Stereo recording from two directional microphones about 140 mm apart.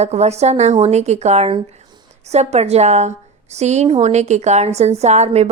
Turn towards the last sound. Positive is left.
turn(degrees=-50)  # may be behind; listen again after turning